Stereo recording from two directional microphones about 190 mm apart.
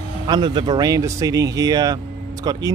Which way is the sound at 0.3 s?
25° right (ahead or behind).